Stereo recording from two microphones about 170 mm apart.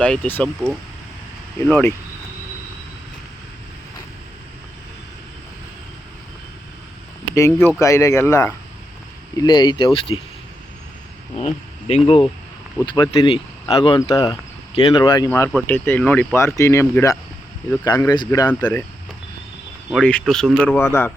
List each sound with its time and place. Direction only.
0.0 s speech: 5° left (ahead or behind)
7.3 s speech: 20° left (ahead or behind)
9.4 s speech: 25° left (ahead or behind)
11.3 s speech: 40° left (ahead or behind)
15.5 s speech: 10° left (ahead or behind)
19.9 s speech: 5° left (ahead or behind)
20.7 s speech: 15° left (ahead or behind)